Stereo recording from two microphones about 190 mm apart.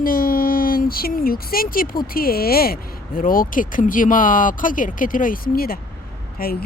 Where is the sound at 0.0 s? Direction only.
50° left (ahead or behind).